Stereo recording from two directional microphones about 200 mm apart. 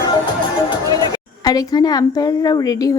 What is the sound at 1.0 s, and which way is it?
A woman's voice, 20° left (ahead or behind).